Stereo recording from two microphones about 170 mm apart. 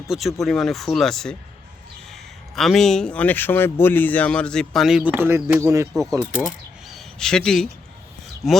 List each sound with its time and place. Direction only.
0.1 s speech: centre (ahead or behind)
2.6 s speech: centre (ahead or behind); by 5.9 s 15° right (ahead or behind)
5.9 s speech: centre (ahead or behind)